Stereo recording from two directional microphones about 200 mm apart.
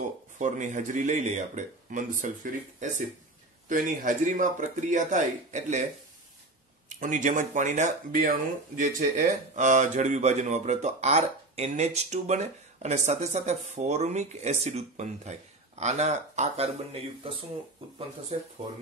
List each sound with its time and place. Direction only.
0.4 s speech: 40° right (ahead or behind)
7.0 s speech: 40° right (ahead or behind)
18.3 s speech: 35° right (ahead or behind)